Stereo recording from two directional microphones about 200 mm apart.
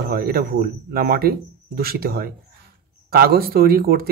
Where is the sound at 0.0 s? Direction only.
50° right (ahead or behind).